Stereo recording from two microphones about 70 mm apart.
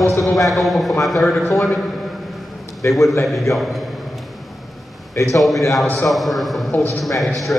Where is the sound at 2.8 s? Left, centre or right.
Left.